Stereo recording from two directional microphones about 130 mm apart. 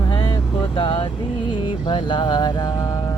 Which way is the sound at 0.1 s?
35° left (ahead or behind).